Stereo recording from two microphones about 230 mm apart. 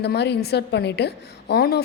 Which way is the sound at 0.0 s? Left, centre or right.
Left.